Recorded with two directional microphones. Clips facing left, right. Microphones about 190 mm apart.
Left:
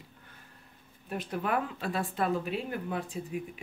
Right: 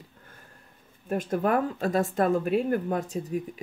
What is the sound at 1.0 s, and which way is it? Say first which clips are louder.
Speech: right 8 dB; 45° right (ahead or behind).